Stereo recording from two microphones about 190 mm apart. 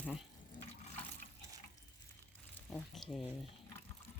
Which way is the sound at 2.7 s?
Centre (ahead or behind).